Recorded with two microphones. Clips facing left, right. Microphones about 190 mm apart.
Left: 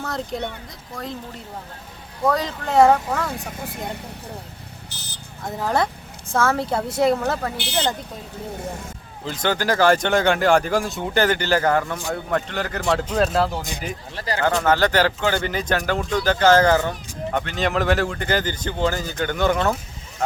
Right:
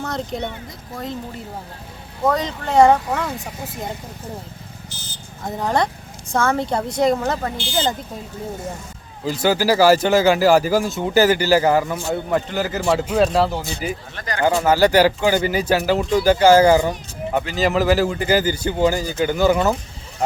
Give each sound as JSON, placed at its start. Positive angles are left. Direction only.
{"t": 0.0, "sound": "speech", "side_deg": 0}
{"t": 4.9, "sound": "vehicle", "side_deg": 65}
{"t": 5.5, "sound": "speech", "side_deg": 0}
{"t": 9.2, "sound": "speech", "side_deg": -5}
{"t": 14.2, "sound": "speech", "side_deg": 30}
{"t": 14.4, "sound": "speech", "side_deg": -10}